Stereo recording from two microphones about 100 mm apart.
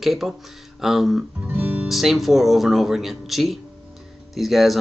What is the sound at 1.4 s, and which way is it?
Music, 20° right (ahead or behind).